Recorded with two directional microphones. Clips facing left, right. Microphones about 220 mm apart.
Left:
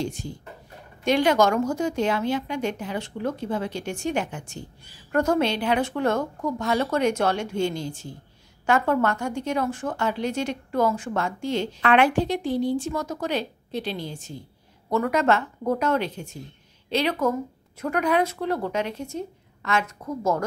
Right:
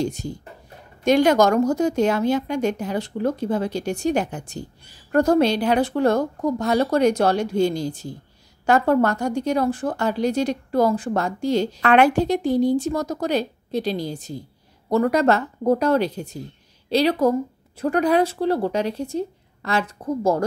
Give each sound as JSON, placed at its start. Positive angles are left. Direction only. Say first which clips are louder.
{"t": 0.0, "sound": "speech", "louder": "right 5 dB", "side_deg": -40}